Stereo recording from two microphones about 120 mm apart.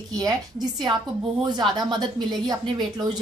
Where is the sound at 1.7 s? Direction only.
35° right (ahead or behind).